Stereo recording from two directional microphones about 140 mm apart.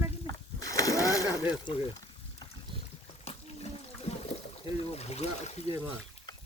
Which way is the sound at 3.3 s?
45° left (ahead or behind).